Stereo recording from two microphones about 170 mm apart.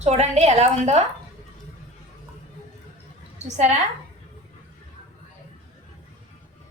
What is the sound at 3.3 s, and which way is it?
Speech, 45° right (ahead or behind).